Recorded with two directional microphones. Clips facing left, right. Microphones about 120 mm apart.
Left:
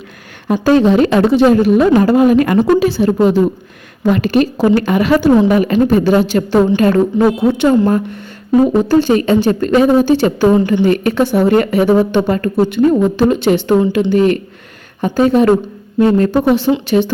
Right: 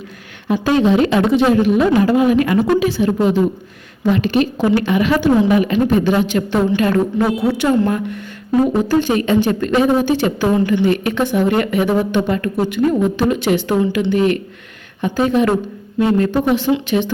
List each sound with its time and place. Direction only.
0.4 s a woman's voice: 40° left (ahead or behind)
7.3 s a woman's voice: 25° left (ahead or behind)
10.7 s speech: 40° left (ahead or behind)